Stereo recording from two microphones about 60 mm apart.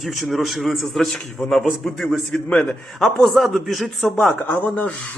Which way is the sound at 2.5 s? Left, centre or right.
Centre.